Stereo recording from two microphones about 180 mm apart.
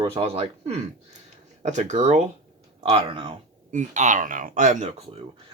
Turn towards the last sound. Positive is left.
turn(degrees=-40)  # may be behind; listen again after turning